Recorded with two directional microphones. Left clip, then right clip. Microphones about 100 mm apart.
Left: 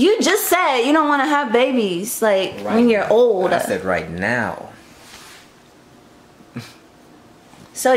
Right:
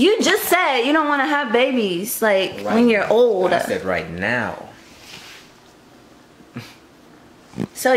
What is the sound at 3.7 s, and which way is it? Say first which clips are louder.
Speech: left 2 dB; 25° left (ahead or behind).